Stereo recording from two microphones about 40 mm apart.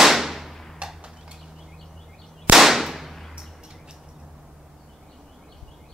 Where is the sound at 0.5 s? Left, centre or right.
Centre.